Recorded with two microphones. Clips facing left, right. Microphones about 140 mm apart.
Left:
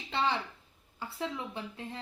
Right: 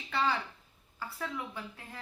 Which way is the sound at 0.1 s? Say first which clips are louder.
Even; 25° left (ahead or behind).